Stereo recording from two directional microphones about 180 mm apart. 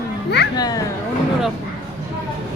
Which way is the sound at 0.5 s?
20° left (ahead or behind).